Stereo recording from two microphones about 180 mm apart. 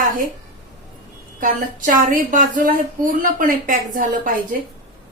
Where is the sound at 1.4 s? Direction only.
50° right (ahead or behind).